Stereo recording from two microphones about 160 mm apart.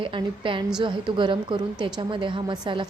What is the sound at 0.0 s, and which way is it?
A woman's voice, 30° right (ahead or behind).